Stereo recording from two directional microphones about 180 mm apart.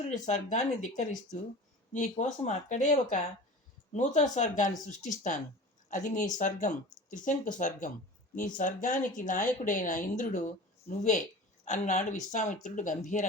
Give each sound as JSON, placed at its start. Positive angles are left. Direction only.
{"t": 0.1, "sound": "speech", "side_deg": 40}